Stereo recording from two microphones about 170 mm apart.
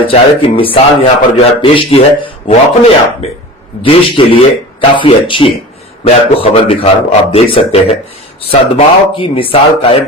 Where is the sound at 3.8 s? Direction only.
30° left (ahead or behind).